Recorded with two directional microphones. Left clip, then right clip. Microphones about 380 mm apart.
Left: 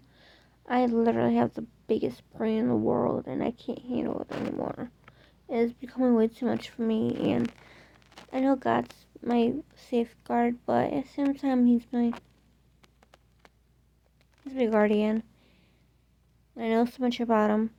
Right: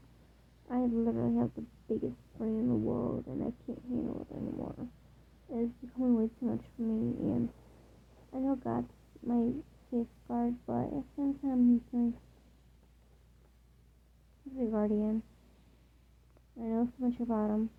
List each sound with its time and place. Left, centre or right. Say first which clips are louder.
0.7 s a woman's voice: left 9 dB; centre
8.3 s a woman's voice: left 10 dB; centre
14.6 s a woman's voice: left 9 dB; centre
16.6 s a woman's voice: left 9 dB; left